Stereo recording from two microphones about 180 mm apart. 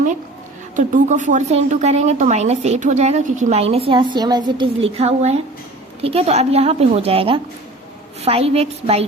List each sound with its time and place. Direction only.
0.8 s a woman's voice: 45° right (ahead or behind)